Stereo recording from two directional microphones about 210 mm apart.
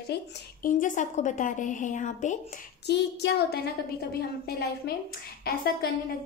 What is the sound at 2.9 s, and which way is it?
A woman's voice, 55° left (ahead or behind).